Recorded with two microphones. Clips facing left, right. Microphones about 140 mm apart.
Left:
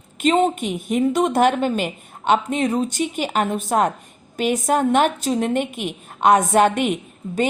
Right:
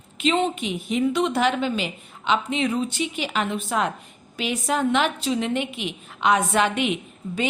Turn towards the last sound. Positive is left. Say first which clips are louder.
# left 4 dB
turn(degrees=45)  # may be behind; listen again after turning